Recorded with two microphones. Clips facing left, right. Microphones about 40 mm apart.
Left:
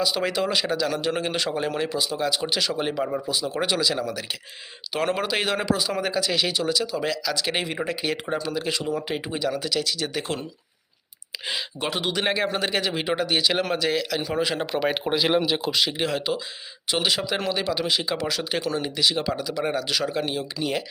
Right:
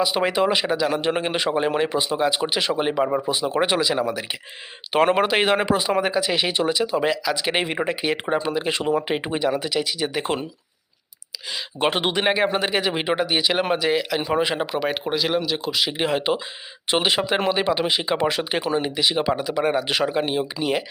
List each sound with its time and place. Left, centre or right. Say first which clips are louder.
0.0 s speech: right 4 dB; right
11.8 s speech: right 7 dB; right
12.1 s speech: right 4 dB; centre
14.7 s speech: even; centre
16.0 s speech: right 4 dB; right